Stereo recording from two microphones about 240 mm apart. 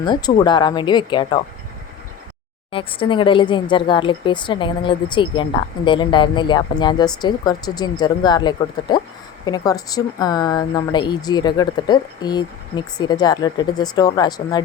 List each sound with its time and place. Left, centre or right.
0.0 s speech: centre
2.7 s a woman's voice: left